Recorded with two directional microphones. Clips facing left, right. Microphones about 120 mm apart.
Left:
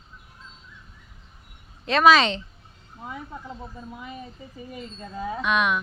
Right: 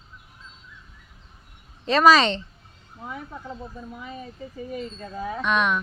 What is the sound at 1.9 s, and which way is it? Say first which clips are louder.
Speech: right 1 dB; centre (ahead or behind).